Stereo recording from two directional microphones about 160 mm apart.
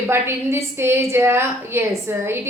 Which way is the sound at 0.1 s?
15° right (ahead or behind).